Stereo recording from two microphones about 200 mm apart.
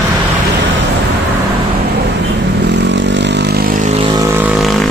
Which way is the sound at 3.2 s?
60° right (ahead or behind).